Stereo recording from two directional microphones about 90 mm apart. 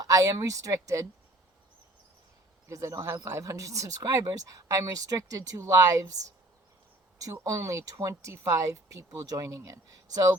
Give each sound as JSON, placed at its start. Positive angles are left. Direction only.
{"t": 0.0, "sound": "speech", "side_deg": -40}
{"t": 2.6, "sound": "speech", "side_deg": -35}
{"t": 7.2, "sound": "speech", "side_deg": -40}